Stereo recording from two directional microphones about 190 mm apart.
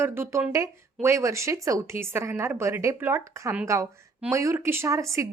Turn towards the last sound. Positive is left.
turn(degrees=-15)  # may be behind; listen again after turning